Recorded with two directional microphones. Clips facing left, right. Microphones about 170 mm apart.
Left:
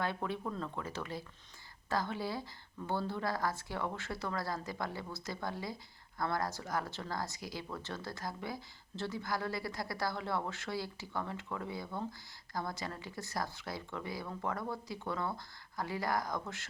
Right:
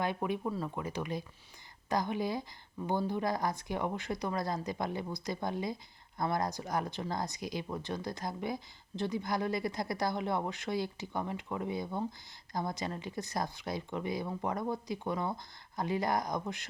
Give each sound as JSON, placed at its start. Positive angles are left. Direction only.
{"t": 0.0, "sound": "speech", "side_deg": -15}